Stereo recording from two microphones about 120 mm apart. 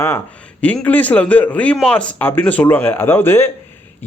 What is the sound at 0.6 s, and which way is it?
Speech, 10° left (ahead or behind).